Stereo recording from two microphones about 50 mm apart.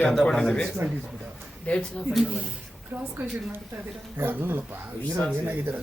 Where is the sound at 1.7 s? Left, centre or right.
Left.